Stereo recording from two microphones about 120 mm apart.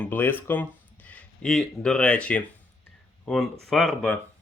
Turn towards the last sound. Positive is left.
turn(degrees=5)  # may be behind; listen again after turning